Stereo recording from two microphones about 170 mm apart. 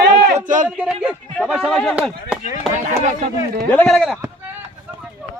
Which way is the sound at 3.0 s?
45° right (ahead or behind).